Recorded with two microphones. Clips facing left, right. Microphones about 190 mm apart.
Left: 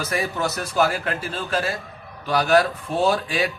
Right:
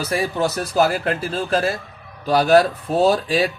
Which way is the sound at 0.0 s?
35° right (ahead or behind).